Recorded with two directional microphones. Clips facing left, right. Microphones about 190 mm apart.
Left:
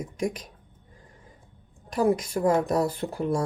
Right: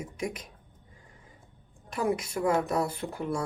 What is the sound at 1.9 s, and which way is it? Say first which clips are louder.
Speech: left 6 dB; 35° left (ahead or behind).